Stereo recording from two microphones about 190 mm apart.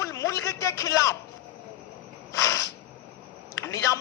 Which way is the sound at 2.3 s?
15° left (ahead or behind).